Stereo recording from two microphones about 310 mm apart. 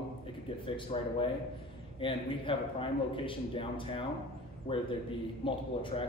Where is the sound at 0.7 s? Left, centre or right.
Centre.